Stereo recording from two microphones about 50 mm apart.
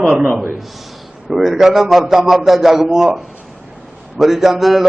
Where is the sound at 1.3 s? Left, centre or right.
Centre.